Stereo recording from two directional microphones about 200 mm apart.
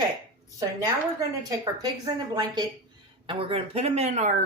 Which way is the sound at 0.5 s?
15° right (ahead or behind).